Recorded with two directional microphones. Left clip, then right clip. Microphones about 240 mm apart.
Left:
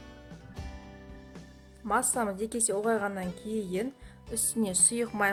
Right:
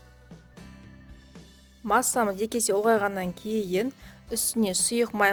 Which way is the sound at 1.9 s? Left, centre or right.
Right.